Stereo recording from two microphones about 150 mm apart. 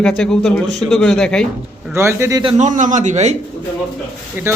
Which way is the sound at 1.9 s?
20° right (ahead or behind).